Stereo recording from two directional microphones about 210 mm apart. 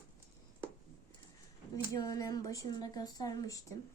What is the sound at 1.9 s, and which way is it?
A woman's voice, 15° left (ahead or behind).